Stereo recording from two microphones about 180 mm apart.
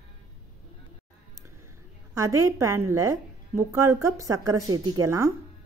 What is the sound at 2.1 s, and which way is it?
A woman's voice, 20° right (ahead or behind).